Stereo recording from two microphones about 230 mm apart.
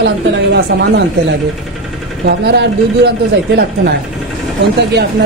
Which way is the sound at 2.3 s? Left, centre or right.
Right.